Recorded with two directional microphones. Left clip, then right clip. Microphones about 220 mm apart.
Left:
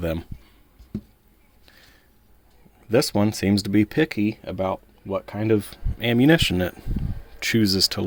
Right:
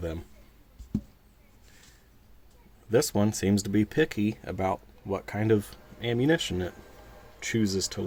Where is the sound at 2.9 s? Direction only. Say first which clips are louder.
Left 5 dB; 25° left (ahead or behind).